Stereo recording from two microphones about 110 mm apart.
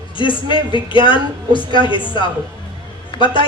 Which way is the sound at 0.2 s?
50° left (ahead or behind).